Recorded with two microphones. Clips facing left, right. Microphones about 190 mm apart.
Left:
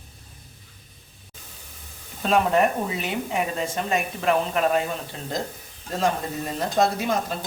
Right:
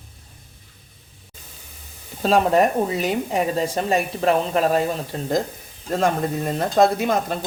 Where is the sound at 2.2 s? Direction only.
35° right (ahead or behind).